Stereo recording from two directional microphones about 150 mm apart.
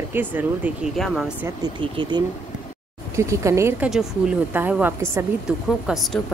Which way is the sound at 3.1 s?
20° right (ahead or behind).